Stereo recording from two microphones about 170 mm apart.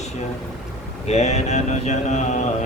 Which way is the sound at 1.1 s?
40° left (ahead or behind).